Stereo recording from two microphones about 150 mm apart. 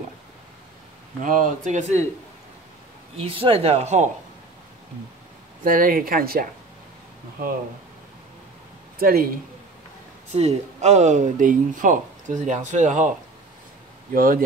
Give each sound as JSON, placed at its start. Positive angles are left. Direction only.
{"t": 1.2, "sound": "speech", "side_deg": -60}
{"t": 3.2, "sound": "speech", "side_deg": -35}
{"t": 5.6, "sound": "speech", "side_deg": -70}
{"t": 9.0, "sound": "a man's voice", "side_deg": -80}
{"t": 10.3, "sound": "speech", "side_deg": -50}
{"t": 14.1, "sound": "speech", "side_deg": -65}